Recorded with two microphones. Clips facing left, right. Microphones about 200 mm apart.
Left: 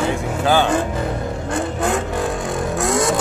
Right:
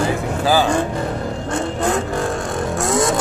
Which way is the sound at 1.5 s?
Centre (ahead or behind).